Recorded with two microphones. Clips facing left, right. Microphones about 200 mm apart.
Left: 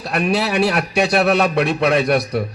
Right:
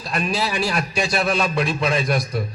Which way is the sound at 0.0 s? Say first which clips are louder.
Left 5 dB; 65° left (ahead or behind).